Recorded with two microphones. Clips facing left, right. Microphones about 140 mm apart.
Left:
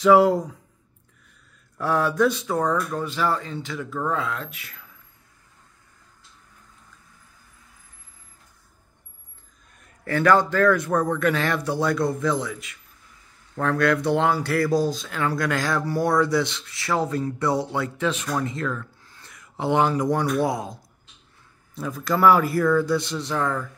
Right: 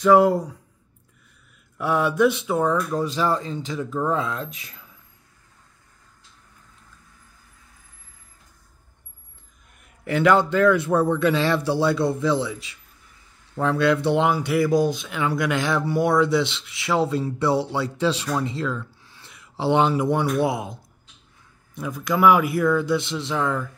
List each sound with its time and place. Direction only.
0.0 s speech: centre (ahead or behind)
1.8 s speech: 20° right (ahead or behind)
2.4 s speech: 5° right (ahead or behind)
10.0 s speech: 20° right (ahead or behind)
10.9 s speech: 5° right (ahead or behind)
11.1 s speech: 25° right (ahead or behind)
13.6 s speech: 25° right (ahead or behind)
22.2 s speech: 15° right (ahead or behind)